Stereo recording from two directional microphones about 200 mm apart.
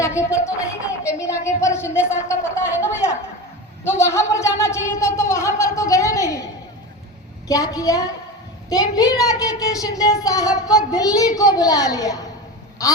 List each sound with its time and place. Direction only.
0.2 s speech: 15° left (ahead or behind)